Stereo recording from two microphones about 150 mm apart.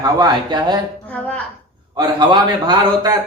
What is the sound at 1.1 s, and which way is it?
Speech, 10° left (ahead or behind).